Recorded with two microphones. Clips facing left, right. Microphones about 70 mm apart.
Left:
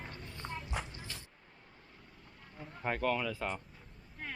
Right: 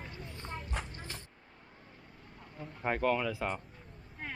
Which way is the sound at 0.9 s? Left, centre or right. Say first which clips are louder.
Right 2 dB; right.